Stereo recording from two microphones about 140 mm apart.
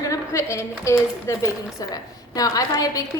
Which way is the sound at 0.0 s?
20° left (ahead or behind).